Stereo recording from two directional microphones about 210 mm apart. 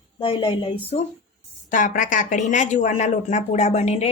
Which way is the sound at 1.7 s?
40° left (ahead or behind).